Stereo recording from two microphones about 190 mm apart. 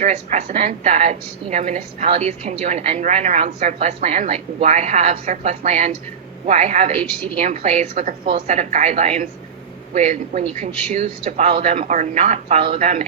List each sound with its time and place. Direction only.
0.0 s a woman's voice: 35° right (ahead or behind)
8.3 s a woman's voice: 30° right (ahead or behind)